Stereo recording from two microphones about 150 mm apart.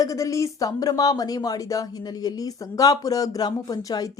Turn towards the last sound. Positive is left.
turn(degrees=25)  # may be behind; listen again after turning